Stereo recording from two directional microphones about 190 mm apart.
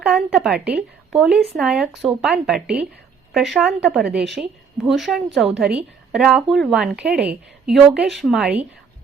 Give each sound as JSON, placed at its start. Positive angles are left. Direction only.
{"t": 0.0, "sound": "speech", "side_deg": -5}